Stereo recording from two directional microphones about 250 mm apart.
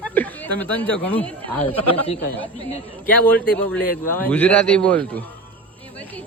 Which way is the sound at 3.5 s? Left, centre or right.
Centre.